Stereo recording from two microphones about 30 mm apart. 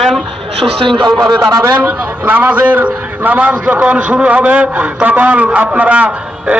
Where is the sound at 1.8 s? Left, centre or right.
Right.